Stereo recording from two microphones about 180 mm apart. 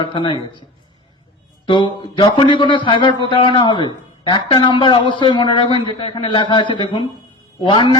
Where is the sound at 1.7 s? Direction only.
25° left (ahead or behind).